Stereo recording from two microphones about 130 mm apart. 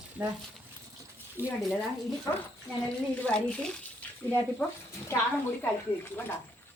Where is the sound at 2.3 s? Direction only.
25° left (ahead or behind).